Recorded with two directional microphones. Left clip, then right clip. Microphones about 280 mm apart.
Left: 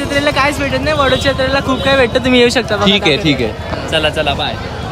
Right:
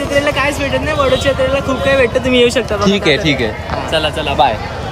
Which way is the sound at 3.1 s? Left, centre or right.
Centre.